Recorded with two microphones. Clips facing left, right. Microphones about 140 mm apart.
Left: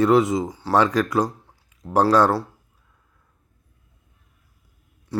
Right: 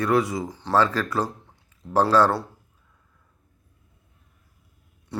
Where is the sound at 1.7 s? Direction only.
15° left (ahead or behind).